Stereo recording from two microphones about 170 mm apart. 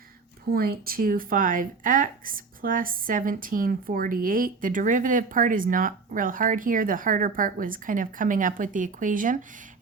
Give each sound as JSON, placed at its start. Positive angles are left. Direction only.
{"t": 0.5, "sound": "speech", "side_deg": -65}